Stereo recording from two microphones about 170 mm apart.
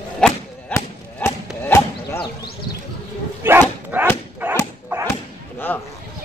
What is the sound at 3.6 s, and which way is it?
Dog, 10° right (ahead or behind).